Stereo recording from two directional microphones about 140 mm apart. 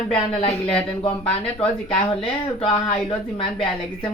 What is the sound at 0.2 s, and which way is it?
Speech, 40° left (ahead or behind).